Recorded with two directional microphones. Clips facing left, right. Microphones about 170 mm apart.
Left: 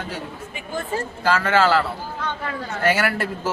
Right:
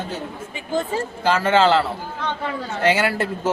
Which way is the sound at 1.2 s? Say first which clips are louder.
Right 2 dB; 20° right (ahead or behind).